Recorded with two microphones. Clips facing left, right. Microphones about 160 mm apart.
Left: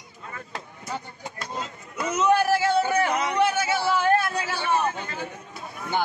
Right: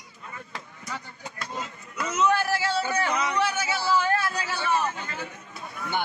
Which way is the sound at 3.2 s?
55° left (ahead or behind).